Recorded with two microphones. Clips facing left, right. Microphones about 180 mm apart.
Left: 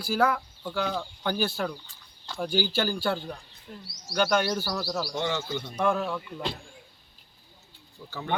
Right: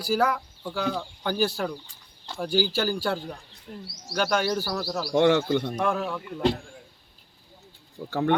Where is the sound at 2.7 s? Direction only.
5° right (ahead or behind).